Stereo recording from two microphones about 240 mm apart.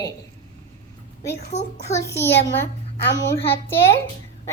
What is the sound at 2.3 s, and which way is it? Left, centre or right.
Speech, left.